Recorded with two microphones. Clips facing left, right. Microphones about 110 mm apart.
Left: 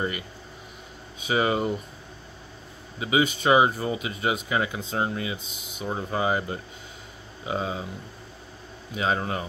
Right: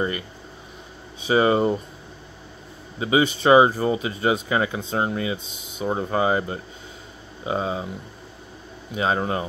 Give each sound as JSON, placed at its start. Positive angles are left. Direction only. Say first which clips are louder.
{"t": 1.2, "sound": "speech", "louder": "right 6 dB", "side_deg": -30}
{"t": 3.0, "sound": "speech", "louder": "right 3 dB", "side_deg": -30}
{"t": 8.9, "sound": "speech", "louder": "right 3 dB", "side_deg": -30}